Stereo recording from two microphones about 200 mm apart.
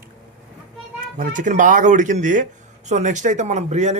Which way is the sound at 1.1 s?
40° right (ahead or behind).